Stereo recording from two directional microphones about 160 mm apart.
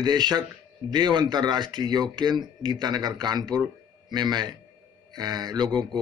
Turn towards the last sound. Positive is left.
turn(degrees=-25)  # may be behind; listen again after turning